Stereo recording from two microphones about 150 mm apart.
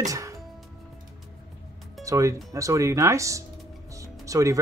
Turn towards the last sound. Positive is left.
turn(degrees=-20)  # may be behind; listen again after turning